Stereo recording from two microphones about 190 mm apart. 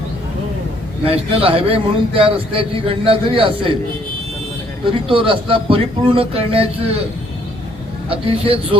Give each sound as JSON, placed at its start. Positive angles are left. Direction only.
{"t": 1.0, "sound": "a man's voice", "side_deg": -30}
{"t": 4.9, "sound": "a man's voice", "side_deg": -30}
{"t": 8.1, "sound": "a man's voice", "side_deg": -30}